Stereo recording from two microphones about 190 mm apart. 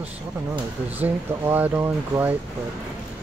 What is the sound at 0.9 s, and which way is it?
Speech, 10° right (ahead or behind).